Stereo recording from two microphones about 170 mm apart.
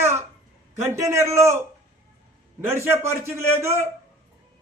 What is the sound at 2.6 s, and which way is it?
Speech, 15° right (ahead or behind).